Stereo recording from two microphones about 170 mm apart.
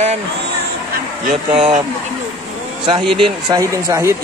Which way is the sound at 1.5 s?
35° right (ahead or behind).